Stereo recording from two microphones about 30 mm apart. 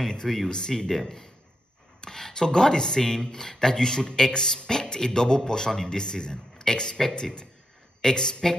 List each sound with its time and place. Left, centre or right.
0.5 s speech: left